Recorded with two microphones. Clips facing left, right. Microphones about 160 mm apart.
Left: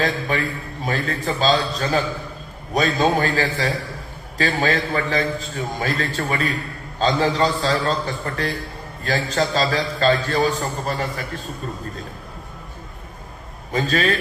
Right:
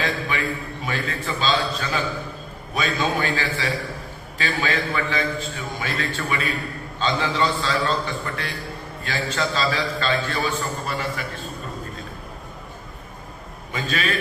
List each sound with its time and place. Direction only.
0.0 s a man's voice: 40° left (ahead or behind)
13.7 s a man's voice: 40° left (ahead or behind)